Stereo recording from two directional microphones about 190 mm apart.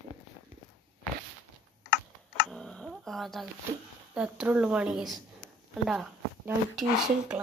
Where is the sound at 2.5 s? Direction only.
5° left (ahead or behind).